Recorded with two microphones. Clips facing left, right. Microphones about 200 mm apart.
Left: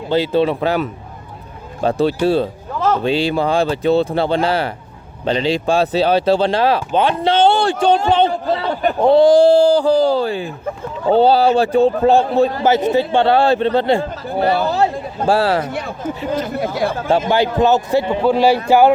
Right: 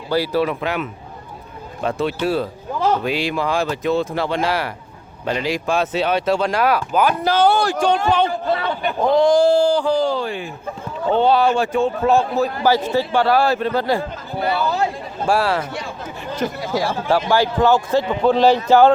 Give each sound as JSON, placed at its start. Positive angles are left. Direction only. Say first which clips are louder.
{"t": 0.1, "sound": "a man's voice", "louder": "left 3 dB", "side_deg": 25}
{"t": 8.7, "sound": "a man's voice", "louder": "left 7 dB", "side_deg": 40}
{"t": 15.6, "sound": "speech", "louder": "left 6 dB", "side_deg": 60}
{"t": 17.2, "sound": "speech", "louder": "left 1 dB", "side_deg": 20}
{"t": 18.2, "sound": "speech", "louder": "right 1 dB", "side_deg": 10}